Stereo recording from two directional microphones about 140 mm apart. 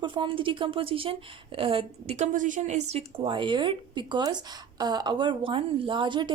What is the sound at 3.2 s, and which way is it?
A woman's voice, 35° right (ahead or behind).